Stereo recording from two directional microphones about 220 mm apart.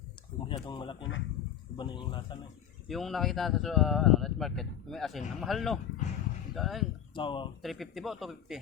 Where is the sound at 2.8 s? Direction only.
Centre (ahead or behind).